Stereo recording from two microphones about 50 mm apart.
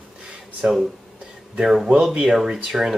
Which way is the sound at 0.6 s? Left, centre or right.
Right.